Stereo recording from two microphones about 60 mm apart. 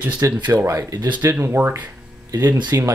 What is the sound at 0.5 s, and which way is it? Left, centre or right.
Speech, right.